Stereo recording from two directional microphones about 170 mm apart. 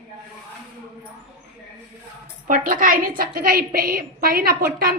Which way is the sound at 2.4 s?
55° right (ahead or behind).